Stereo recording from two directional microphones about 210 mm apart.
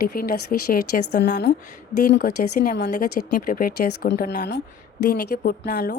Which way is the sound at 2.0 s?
40° left (ahead or behind).